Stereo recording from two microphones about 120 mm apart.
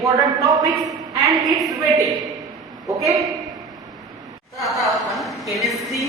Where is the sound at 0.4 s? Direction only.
Centre (ahead or behind).